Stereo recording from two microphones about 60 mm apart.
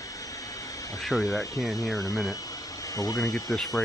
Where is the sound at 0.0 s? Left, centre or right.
Left.